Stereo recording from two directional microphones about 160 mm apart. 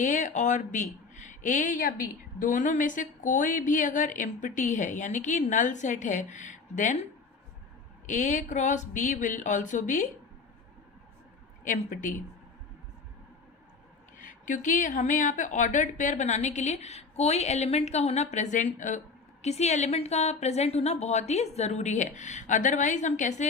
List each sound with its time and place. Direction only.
0.0 s speech: 50° left (ahead or behind)
8.0 s speech: 50° left (ahead or behind)
11.6 s speech: 55° left (ahead or behind)
14.2 s speech: 55° left (ahead or behind)